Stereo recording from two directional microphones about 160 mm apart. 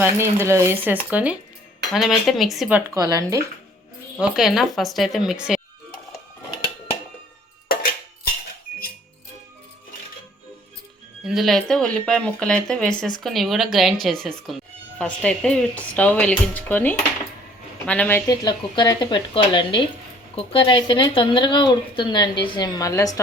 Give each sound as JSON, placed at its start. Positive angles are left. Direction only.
{"t": 0.0, "sound": "speech", "side_deg": -15}
{"t": 2.9, "sound": "speech", "side_deg": -20}
{"t": 4.2, "sound": "speech", "side_deg": 0}
{"t": 11.3, "sound": "speech", "side_deg": 0}
{"t": 18.3, "sound": "speech", "side_deg": 25}